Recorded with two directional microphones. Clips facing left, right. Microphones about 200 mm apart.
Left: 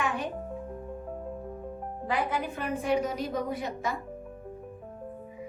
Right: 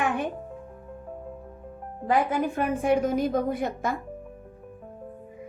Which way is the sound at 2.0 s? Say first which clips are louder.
Right 6 dB; 50° right (ahead or behind).